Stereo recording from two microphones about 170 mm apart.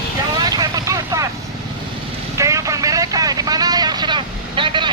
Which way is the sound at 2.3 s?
20° right (ahead or behind).